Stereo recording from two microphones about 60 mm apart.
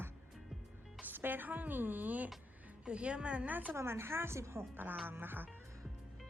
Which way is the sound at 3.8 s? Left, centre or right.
Right.